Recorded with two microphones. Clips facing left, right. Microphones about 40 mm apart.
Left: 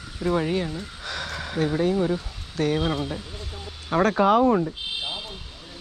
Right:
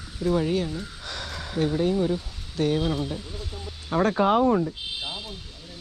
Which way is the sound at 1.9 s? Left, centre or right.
Left.